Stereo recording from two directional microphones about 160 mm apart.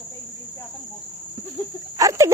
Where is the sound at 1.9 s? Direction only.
20° right (ahead or behind).